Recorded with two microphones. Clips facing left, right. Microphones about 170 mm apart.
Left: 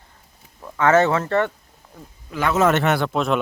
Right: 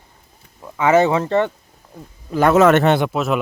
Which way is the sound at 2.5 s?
65° right (ahead or behind).